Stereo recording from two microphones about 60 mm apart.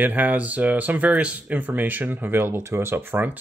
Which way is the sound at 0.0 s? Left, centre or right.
Right.